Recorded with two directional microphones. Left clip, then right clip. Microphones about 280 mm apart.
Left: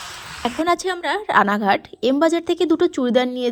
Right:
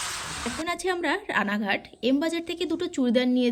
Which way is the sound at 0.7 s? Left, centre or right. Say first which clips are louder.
Left 5 dB; centre.